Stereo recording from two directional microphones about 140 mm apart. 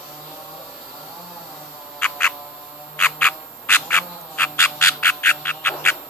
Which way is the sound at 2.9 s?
15° left (ahead or behind).